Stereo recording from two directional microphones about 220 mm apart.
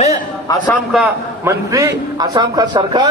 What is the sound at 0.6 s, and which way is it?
A man's voice, 5° right (ahead or behind).